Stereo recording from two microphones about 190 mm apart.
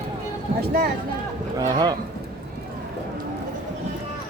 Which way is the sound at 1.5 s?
20° right (ahead or behind).